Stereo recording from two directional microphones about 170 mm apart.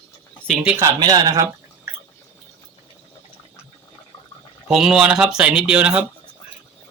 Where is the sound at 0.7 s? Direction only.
25° right (ahead or behind).